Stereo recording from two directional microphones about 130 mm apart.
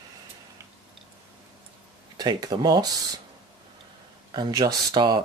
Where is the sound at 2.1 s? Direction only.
30° right (ahead or behind).